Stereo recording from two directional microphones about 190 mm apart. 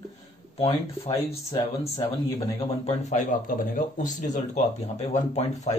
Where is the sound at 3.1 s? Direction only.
45° left (ahead or behind).